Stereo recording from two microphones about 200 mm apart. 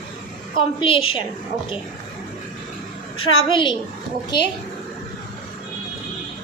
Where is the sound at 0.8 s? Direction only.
25° left (ahead or behind).